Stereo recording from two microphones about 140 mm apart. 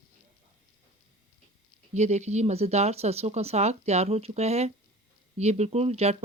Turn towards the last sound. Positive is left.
turn(degrees=-50)  # may be behind; listen again after turning